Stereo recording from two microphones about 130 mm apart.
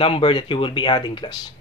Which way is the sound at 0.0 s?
45° left (ahead or behind).